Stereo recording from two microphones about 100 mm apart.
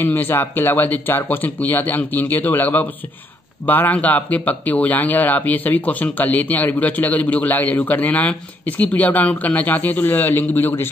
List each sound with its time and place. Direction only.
0.0 s speech: 20° left (ahead or behind)